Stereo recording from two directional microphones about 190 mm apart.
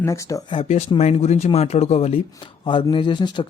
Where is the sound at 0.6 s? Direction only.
35° left (ahead or behind).